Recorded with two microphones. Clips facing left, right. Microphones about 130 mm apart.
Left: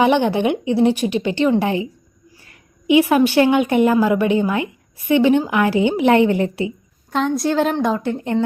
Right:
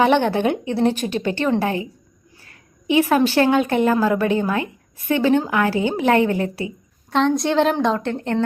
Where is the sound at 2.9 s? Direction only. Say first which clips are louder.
Left 3 dB; 15° left (ahead or behind).